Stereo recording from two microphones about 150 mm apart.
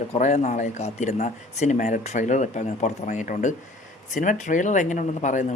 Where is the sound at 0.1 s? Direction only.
50° left (ahead or behind).